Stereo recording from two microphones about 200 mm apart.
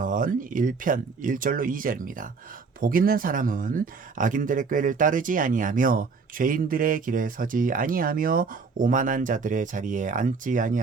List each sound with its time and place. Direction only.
0.0 s speech: 40° right (ahead or behind)